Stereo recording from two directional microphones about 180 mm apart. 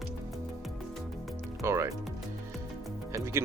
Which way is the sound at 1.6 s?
15° right (ahead or behind).